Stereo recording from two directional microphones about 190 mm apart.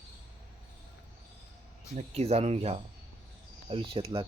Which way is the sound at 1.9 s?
35° right (ahead or behind).